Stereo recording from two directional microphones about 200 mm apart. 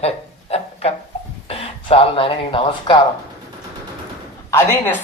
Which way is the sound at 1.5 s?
30° left (ahead or behind).